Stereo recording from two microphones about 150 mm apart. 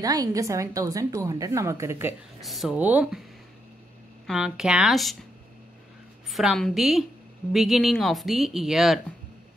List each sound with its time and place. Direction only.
0.0 s a woman's voice: 25° right (ahead or behind)
2.4 s speech: centre (ahead or behind)
4.3 s speech: 5° right (ahead or behind)
6.3 s speech: centre (ahead or behind)